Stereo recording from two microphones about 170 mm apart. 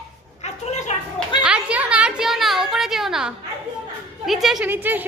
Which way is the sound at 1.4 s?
5° right (ahead or behind).